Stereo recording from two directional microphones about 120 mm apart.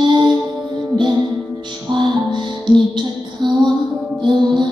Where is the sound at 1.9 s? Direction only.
40° right (ahead or behind).